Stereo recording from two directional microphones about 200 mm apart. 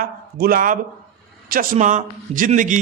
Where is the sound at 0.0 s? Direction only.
45° right (ahead or behind).